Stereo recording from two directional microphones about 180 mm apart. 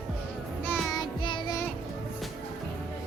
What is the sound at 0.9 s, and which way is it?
Child singing, 25° left (ahead or behind).